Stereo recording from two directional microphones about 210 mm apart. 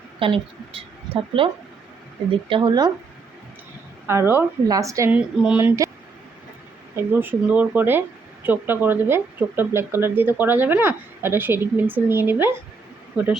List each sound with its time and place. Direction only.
0.2 s speech: 25° right (ahead or behind)
2.5 s speech: 20° right (ahead or behind)
4.0 s speech: 10° right (ahead or behind)
6.9 s speech: 10° right (ahead or behind)